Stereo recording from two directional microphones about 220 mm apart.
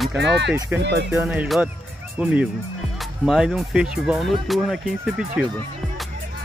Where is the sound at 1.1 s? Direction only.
5° right (ahead or behind).